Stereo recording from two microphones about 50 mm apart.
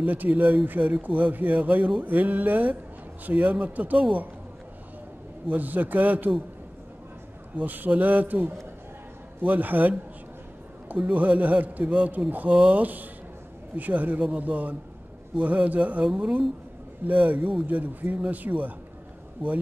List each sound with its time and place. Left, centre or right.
0.0 s speech: right
5.5 s speech: right
7.5 s speech: right
11.0 s speech: right